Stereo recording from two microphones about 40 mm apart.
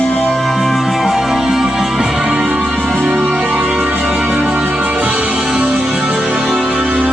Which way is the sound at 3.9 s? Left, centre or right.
Right.